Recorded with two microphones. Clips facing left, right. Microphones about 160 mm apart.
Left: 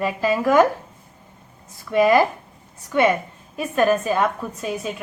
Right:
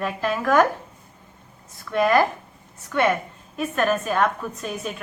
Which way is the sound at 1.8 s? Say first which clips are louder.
Left 3 dB; 15° left (ahead or behind).